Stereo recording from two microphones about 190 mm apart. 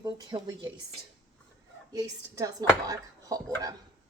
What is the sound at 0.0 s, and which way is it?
Speech, 20° right (ahead or behind).